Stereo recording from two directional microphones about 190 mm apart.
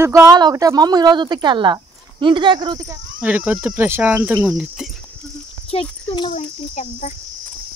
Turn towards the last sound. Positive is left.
turn(degrees=40)  # may be behind; listen again after turning